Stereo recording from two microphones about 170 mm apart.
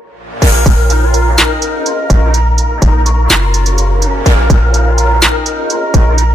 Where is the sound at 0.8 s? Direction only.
Centre (ahead or behind).